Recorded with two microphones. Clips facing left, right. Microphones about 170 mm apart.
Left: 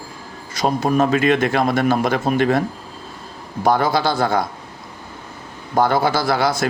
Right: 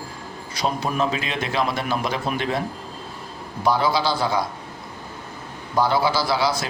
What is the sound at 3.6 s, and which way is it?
Speech, 50° left (ahead or behind).